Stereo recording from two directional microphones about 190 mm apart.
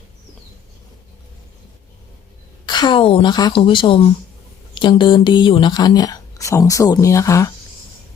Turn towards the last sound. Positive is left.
turn(degrees=15)  # may be behind; listen again after turning